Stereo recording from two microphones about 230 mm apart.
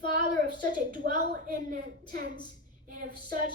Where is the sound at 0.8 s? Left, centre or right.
Right.